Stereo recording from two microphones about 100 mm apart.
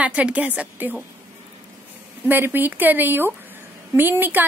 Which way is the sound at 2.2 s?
20° right (ahead or behind).